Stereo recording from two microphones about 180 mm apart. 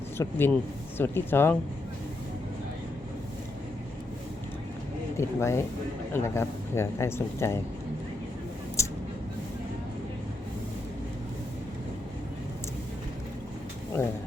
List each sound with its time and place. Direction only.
0.2 s speech: 10° left (ahead or behind)
5.1 s speech: 15° left (ahead or behind)
8.8 s a sound: 15° left (ahead or behind)